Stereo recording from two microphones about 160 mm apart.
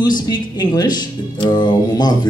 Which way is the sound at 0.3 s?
25° left (ahead or behind).